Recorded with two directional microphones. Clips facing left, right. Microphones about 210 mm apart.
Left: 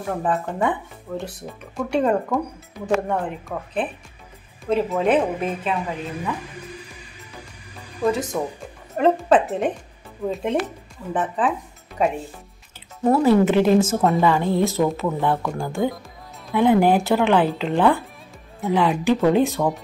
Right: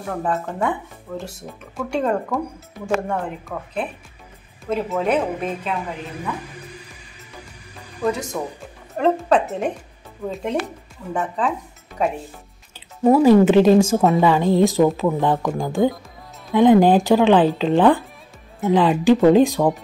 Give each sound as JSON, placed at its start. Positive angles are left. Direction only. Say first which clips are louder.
{"t": 0.0, "sound": "speech", "louder": "left 1 dB", "side_deg": 0}
{"t": 8.3, "sound": "speech", "louder": "left 2 dB", "side_deg": 0}
{"t": 13.0, "sound": "speech", "louder": "right 4 dB", "side_deg": -15}
{"t": 13.9, "sound": "speech", "louder": "right 3 dB", "side_deg": 0}
{"t": 14.2, "sound": "speech", "louder": "right 3 dB", "side_deg": -15}